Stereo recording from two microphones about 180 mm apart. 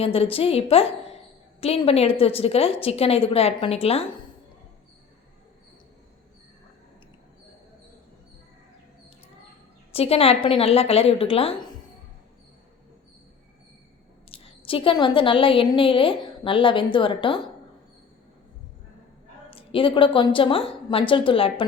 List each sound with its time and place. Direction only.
0.0 s a woman's voice: 30° left (ahead or behind)
9.9 s a woman's voice: 35° left (ahead or behind)
14.3 s a woman's voice: 30° left (ahead or behind)
19.5 s a woman's voice: 30° left (ahead or behind)